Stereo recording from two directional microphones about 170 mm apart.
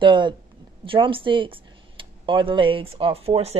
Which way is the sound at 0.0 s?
30° right (ahead or behind).